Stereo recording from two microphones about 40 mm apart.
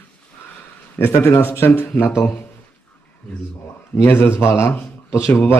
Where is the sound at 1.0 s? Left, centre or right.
Left.